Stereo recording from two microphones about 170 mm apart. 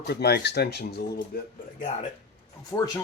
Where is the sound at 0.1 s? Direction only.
70° left (ahead or behind).